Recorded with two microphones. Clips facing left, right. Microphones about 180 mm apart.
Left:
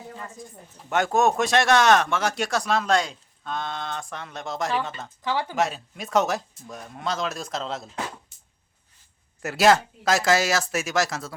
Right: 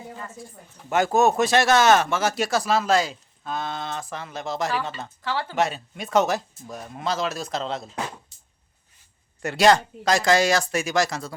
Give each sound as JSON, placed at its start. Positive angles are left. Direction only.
{"t": 0.9, "sound": "speech", "side_deg": 0}
{"t": 5.2, "sound": "speech", "side_deg": 15}
{"t": 5.5, "sound": "speech", "side_deg": 0}
{"t": 9.4, "sound": "speech", "side_deg": 5}